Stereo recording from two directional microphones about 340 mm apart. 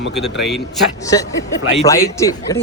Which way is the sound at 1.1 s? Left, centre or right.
Centre.